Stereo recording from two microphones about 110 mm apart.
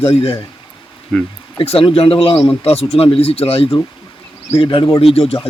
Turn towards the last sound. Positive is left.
turn(degrees=65)  # may be behind; listen again after turning